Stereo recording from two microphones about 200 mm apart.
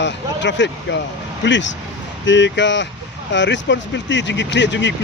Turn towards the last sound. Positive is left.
turn(degrees=65)  # may be behind; listen again after turning